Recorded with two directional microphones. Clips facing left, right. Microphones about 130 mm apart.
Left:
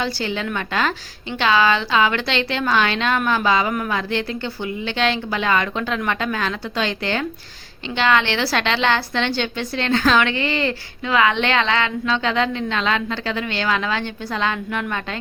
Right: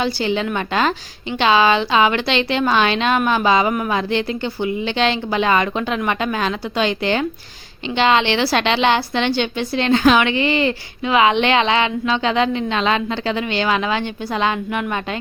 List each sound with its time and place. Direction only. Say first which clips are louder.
0.0 s a woman's voice: right 4 dB; 20° right (ahead or behind)